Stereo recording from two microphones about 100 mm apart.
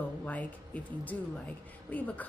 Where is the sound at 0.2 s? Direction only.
15° left (ahead or behind).